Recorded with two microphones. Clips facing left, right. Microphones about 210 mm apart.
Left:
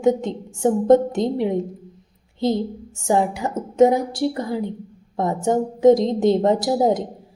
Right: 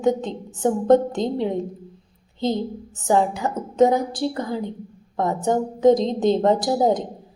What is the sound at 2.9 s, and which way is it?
A woman's voice, 25° left (ahead or behind).